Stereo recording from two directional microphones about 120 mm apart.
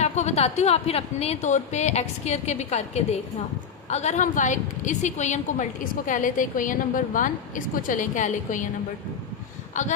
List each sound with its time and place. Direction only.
0.0 s a woman's voice: 65° left (ahead or behind); by 8.6 s 90° left
9.7 s a woman's voice: 90° left